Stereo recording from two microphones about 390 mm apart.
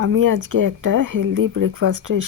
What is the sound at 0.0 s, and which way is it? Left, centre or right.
Speech, right.